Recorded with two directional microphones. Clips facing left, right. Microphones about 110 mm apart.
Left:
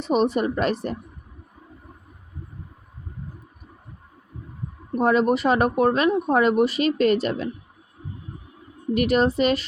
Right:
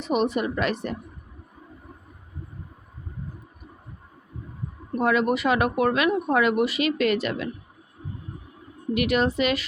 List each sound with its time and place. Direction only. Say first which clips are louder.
0.0 s speech: left 3 dB; 35° left (ahead or behind)
4.9 s speech: left 3 dB; 35° left (ahead or behind)
9.0 s speech: left 3 dB; 35° left (ahead or behind)